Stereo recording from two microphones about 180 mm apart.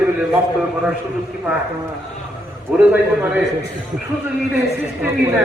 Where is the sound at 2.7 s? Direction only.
10° right (ahead or behind).